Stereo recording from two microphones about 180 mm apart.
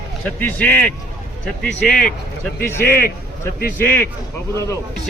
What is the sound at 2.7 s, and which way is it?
Speech, 10° left (ahead or behind).